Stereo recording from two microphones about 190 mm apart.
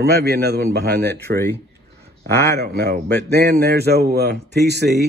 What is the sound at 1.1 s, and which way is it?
Speech, 15° left (ahead or behind).